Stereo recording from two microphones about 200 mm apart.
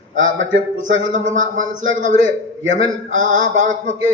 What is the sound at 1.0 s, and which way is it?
A man's voice, 40° right (ahead or behind).